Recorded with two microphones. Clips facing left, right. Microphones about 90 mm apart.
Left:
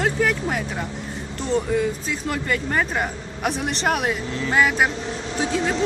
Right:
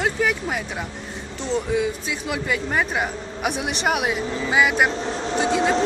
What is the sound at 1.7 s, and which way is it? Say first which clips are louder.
Speech: left 1 dB; 5° right (ahead or behind).